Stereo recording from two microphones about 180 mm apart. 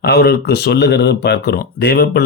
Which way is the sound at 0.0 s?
65° left (ahead or behind).